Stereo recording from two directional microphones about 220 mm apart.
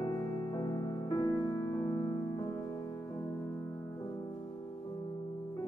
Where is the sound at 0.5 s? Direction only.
20° left (ahead or behind).